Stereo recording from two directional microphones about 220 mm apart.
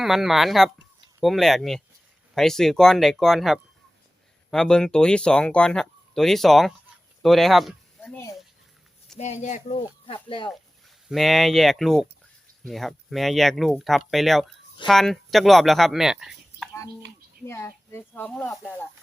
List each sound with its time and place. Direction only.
0.0 s speech: centre (ahead or behind)
9.1 s speech: 30° left (ahead or behind)
11.1 s speech: centre (ahead or behind)
17.4 s speech: 10° left (ahead or behind)